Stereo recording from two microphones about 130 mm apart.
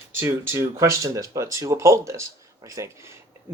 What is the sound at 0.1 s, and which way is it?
Speech, 15° right (ahead or behind).